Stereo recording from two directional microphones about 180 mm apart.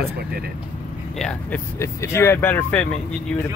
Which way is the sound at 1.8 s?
15° left (ahead or behind).